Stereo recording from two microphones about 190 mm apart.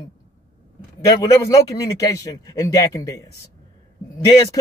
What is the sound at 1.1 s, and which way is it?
Speech, 15° left (ahead or behind).